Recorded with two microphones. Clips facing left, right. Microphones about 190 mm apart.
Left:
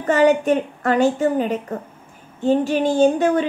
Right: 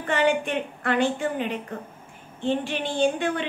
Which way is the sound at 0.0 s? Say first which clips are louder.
Left 7 dB; 40° left (ahead or behind).